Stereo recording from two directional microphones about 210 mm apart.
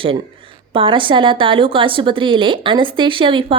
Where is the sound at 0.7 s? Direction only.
25° right (ahead or behind).